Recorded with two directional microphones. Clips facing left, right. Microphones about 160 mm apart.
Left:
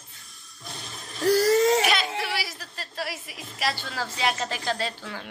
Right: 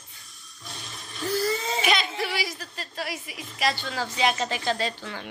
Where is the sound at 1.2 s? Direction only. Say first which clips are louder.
Left 8 dB; 85° left.